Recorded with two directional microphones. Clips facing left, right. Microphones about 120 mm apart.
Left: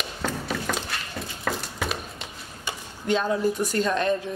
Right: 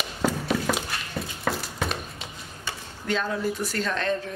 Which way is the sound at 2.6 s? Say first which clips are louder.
Left 2 dB; 15° left (ahead or behind).